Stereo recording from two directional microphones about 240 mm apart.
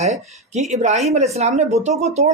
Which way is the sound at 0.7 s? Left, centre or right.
Right.